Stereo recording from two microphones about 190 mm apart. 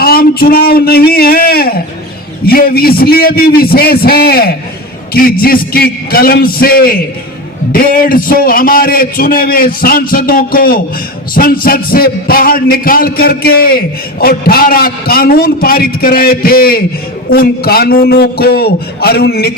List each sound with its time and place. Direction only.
0.0 s a man's voice: 55° left (ahead or behind)